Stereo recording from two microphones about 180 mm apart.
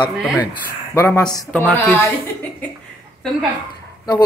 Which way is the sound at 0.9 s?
15° left (ahead or behind).